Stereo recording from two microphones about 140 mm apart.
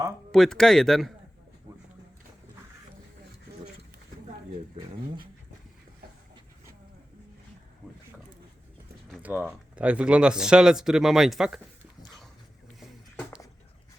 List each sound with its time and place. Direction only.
0.3 s speech: 5° left (ahead or behind)
9.2 s speech: 10° right (ahead or behind)